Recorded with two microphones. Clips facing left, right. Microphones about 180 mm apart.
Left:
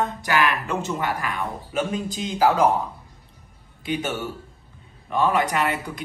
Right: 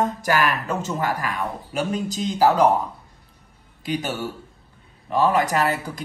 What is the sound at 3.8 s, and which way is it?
Speech, 40° right (ahead or behind).